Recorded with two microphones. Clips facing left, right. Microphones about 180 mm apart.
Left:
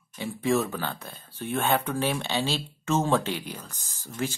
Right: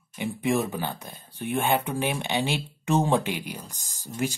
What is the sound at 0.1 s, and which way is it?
Speech, 15° right (ahead or behind).